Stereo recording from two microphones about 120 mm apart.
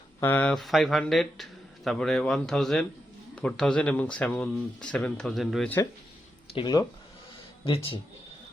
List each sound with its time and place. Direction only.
0.2 s speech: 15° left (ahead or behind)
0.5 s speech: centre (ahead or behind)
7.6 s speech: 50° left (ahead or behind)